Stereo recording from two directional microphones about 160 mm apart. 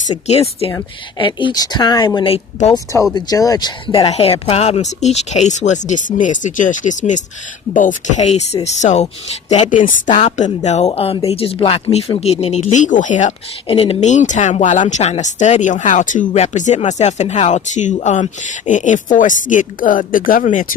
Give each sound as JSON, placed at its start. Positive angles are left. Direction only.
{"t": 0.3, "sound": "speech", "side_deg": 40}
{"t": 2.7, "sound": "speech", "side_deg": 20}
{"t": 13.7, "sound": "speech", "side_deg": 40}